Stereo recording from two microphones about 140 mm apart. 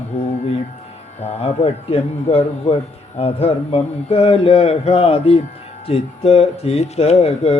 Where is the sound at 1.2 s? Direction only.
45° left (ahead or behind).